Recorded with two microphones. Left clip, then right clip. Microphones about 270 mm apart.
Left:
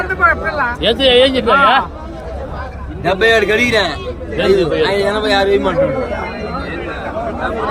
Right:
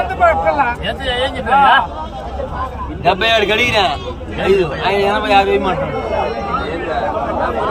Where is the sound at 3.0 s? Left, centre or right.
Centre.